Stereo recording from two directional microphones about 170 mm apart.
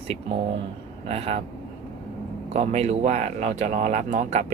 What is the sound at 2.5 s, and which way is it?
Speech, 40° right (ahead or behind).